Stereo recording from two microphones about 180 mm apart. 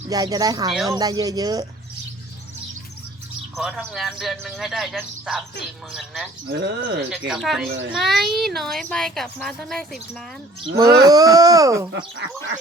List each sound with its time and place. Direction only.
0.1 s speech: 20° right (ahead or behind)
3.9 s a child's voice: centre (ahead or behind)
6.5 s speech: 75° right (ahead or behind)
7.1 s a child's voice: centre (ahead or behind)
10.8 s speech: 20° right (ahead or behind)